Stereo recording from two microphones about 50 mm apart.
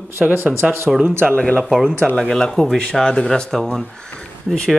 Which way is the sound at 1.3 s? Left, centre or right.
Left.